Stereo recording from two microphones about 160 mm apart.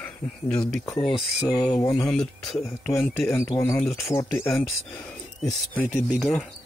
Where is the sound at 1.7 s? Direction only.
20° left (ahead or behind).